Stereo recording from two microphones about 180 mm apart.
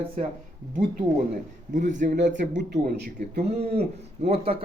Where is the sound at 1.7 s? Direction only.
45° right (ahead or behind).